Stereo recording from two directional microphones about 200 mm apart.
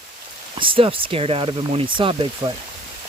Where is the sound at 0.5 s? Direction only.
25° right (ahead or behind).